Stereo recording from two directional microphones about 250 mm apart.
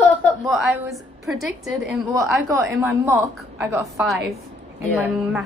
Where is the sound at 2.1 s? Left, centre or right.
Centre.